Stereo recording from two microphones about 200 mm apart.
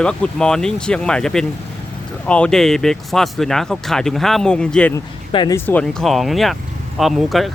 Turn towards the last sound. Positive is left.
turn(degrees=0)  # may be behind; listen again after turning